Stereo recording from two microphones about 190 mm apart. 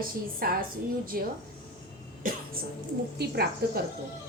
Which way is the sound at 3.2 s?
55° right (ahead or behind).